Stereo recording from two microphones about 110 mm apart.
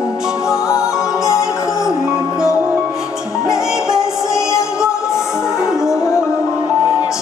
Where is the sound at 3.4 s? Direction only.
5° right (ahead or behind).